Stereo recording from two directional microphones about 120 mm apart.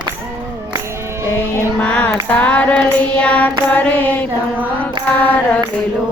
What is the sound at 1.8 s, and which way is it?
Child singing, 10° left (ahead or behind).